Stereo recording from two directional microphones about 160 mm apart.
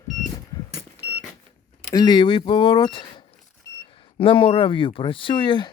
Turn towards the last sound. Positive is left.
turn(degrees=30)  # may be behind; listen again after turning